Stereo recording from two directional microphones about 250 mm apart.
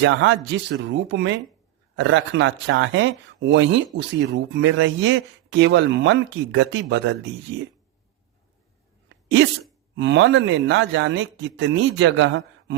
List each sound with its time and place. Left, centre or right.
0.0 s speech: right
9.9 s speech: right